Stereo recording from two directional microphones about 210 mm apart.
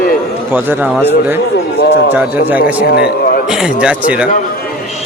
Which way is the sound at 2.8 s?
50° left (ahead or behind).